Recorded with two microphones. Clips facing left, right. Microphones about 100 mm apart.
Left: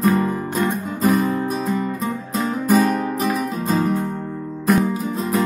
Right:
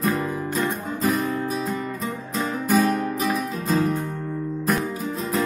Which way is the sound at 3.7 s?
45° left (ahead or behind).